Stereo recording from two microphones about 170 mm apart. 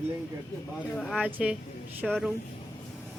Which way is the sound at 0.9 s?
5° left (ahead or behind).